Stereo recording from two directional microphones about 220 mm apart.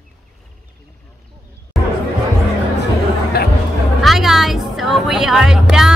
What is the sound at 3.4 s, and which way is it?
Music, 45° left (ahead or behind).